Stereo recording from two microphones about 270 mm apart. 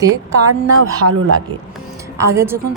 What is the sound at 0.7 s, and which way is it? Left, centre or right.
Speech, right.